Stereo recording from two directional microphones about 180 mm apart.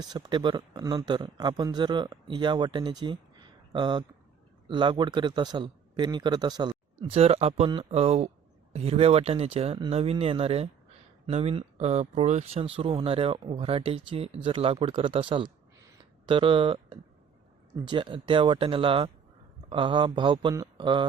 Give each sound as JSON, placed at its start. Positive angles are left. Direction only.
{"t": 0.0, "sound": "speech", "side_deg": -25}
{"t": 15.9, "sound": "a sound", "side_deg": -25}
{"t": 17.8, "sound": "speech", "side_deg": -30}